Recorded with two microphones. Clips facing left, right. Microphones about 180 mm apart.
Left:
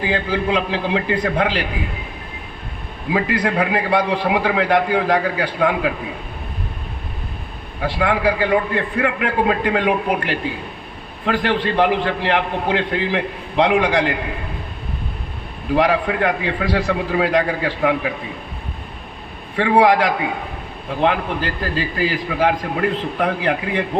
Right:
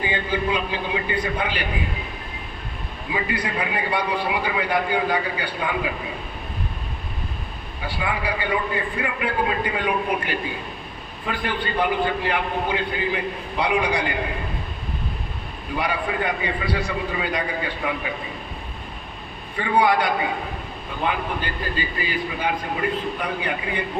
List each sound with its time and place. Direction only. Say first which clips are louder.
0.1 s a man's voice: left 7 dB; 90° left
3.1 s a man's voice: left 7 dB; 85° left
7.8 s a man's voice: left 8 dB; 75° left (ahead or behind)
15.7 s a man's voice: left 8 dB; 85° left
19.5 s a man's voice: left 6 dB; 90° left